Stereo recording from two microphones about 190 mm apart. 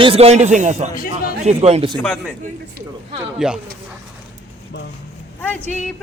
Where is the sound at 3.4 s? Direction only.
5° right (ahead or behind).